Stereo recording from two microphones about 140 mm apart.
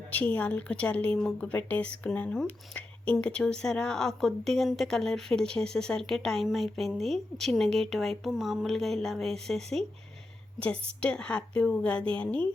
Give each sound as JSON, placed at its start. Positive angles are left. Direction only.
{"t": 0.1, "sound": "a woman's voice", "side_deg": 10}